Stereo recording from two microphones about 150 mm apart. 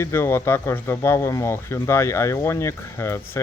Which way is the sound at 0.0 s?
15° left (ahead or behind).